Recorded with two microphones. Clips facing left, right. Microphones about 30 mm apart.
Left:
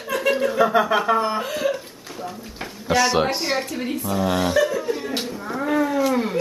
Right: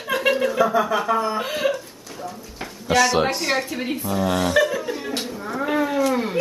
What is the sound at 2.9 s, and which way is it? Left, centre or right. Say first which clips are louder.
Speech: right 1 dB; centre.